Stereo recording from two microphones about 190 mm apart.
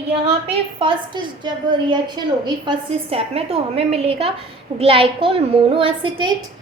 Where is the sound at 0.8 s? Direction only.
25° right (ahead or behind).